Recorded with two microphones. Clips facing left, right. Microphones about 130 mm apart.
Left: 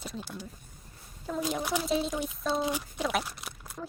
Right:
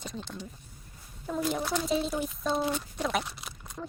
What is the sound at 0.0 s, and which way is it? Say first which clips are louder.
Speech: even; 5° left (ahead or behind).